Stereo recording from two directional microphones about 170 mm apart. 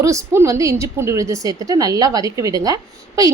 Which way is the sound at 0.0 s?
20° right (ahead or behind).